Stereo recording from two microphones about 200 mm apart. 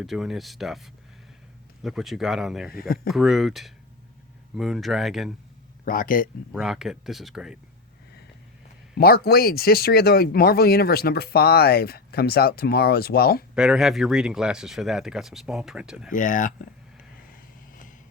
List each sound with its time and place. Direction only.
0.0 s speech: centre (ahead or behind)
5.8 s speech: 45° left (ahead or behind)
6.5 s speech: centre (ahead or behind)
9.0 s speech: 50° left (ahead or behind)
13.6 s speech: 5° right (ahead or behind)
16.1 s speech: 40° left (ahead or behind)